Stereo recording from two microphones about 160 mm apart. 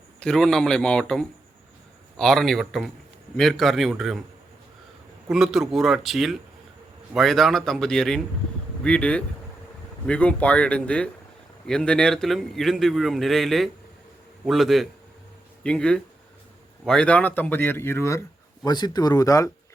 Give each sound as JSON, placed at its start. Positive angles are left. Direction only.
{"t": 0.2, "sound": "a man's voice", "side_deg": 5}
{"t": 5.3, "sound": "a man's voice", "side_deg": 0}